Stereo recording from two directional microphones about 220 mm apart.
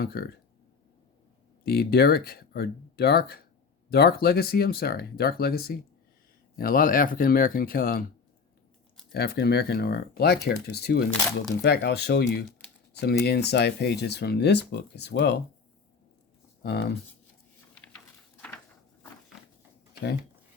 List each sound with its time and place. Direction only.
0.0 s speech: 45° left (ahead or behind)
1.6 s speech: 45° left (ahead or behind)
9.1 s speech: 45° left (ahead or behind)
12.9 s a sound: 50° left (ahead or behind)
13.2 s speech: 50° left (ahead or behind)
16.6 s speech: 45° left (ahead or behind)